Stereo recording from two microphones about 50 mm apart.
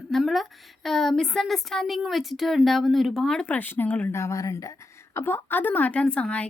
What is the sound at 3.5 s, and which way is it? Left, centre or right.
Speech, left.